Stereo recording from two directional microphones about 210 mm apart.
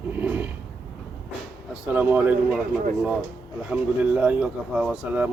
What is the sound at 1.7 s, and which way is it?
Speech, 5° right (ahead or behind).